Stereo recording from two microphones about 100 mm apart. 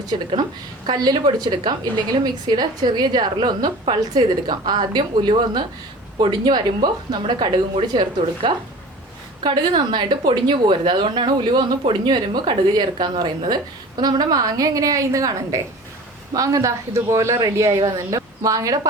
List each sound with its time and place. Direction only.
0.1 s a woman's voice: 55° right (ahead or behind)
0.9 s a woman's voice: 45° right (ahead or behind)
6.1 s a woman's voice: 50° right (ahead or behind)